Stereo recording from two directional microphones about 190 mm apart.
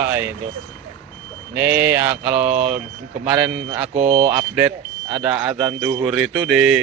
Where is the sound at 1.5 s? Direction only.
10° right (ahead or behind).